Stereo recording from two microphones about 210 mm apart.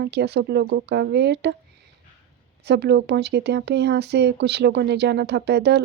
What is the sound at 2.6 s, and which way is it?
Speech, 55° right (ahead or behind).